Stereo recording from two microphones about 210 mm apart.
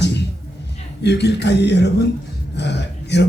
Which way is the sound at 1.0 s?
55° left (ahead or behind).